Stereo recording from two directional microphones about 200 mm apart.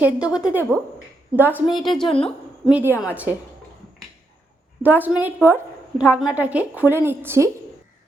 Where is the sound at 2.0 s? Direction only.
30° left (ahead or behind).